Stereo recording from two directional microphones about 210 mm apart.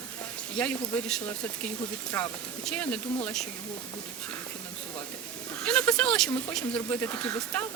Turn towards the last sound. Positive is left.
turn(degrees=10)  # may be behind; listen again after turning